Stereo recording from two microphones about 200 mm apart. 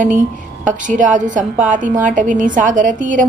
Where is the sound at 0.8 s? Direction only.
40° right (ahead or behind).